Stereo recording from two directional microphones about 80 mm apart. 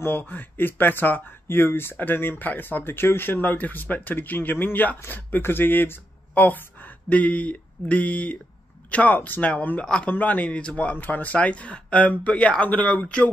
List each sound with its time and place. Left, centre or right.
0.0 s speech: left